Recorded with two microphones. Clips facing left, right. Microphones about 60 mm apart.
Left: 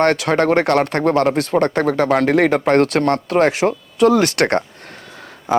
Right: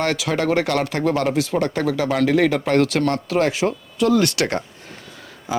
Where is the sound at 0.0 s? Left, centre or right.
Left.